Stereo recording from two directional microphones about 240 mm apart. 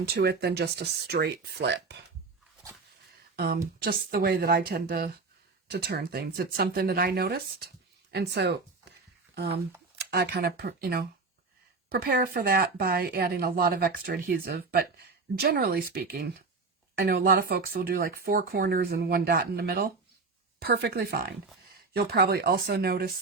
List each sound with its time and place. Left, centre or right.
0.0 s speech: right
3.3 s speech: right